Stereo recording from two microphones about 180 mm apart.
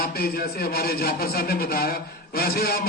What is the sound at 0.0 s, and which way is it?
A man's voice, 60° left (ahead or behind).